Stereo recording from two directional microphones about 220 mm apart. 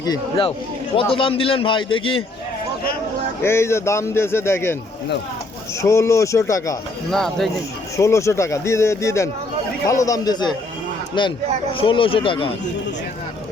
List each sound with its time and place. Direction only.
0.0 s a man's voice: 20° left (ahead or behind)
3.4 s speech: 10° left (ahead or behind)
5.8 s speech: 10° left (ahead or behind)
7.1 s speech: centre (ahead or behind)
7.9 s a man's voice: 15° left (ahead or behind)